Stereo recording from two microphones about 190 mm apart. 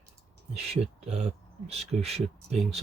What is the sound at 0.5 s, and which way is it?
Speech, 35° right (ahead or behind).